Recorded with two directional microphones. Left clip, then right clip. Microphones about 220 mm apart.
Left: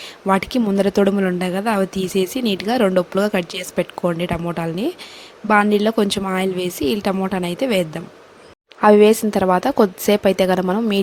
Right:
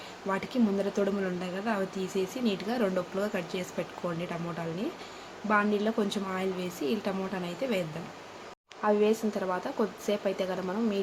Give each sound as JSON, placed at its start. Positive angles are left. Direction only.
{"t": 0.3, "sound": "a woman's voice", "side_deg": 45}
{"t": 5.5, "sound": "a woman's voice", "side_deg": 45}